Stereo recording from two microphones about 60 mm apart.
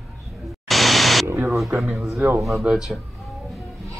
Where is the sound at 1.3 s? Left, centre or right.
Right.